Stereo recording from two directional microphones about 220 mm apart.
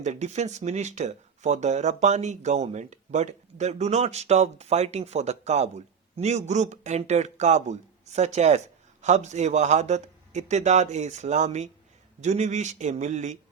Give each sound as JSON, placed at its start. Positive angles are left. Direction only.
{"t": 0.0, "sound": "speech", "side_deg": -30}